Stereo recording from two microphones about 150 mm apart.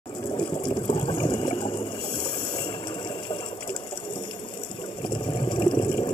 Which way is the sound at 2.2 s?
30° left (ahead or behind).